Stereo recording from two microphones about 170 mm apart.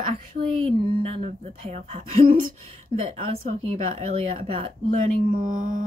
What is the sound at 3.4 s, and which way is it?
Speech, 40° right (ahead or behind).